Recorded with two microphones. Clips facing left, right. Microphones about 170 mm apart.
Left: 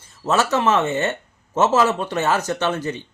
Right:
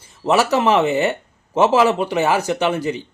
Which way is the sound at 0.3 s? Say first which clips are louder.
Right 3 dB; 15° right (ahead or behind).